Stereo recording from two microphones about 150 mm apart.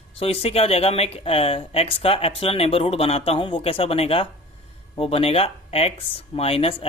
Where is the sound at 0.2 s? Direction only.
40° left (ahead or behind).